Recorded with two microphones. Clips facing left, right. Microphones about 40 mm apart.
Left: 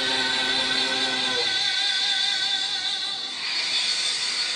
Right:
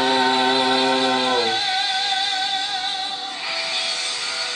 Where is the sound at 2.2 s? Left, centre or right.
Right.